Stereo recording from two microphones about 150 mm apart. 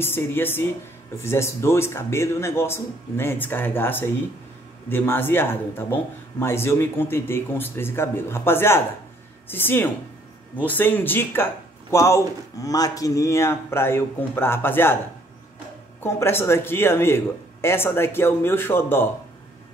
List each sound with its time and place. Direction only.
0.0 s speech: 15° left (ahead or behind)
16.0 s speech: 15° left (ahead or behind)